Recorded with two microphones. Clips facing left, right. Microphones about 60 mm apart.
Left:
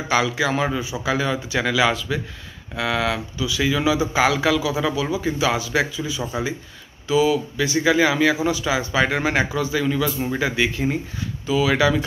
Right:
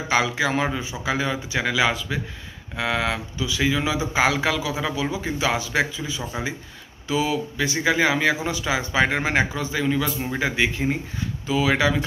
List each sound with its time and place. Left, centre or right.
0.1 s a man's voice: right
7.1 s a man's voice: right
11.4 s speech: right